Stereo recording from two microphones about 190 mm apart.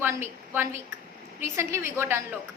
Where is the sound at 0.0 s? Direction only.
10° right (ahead or behind).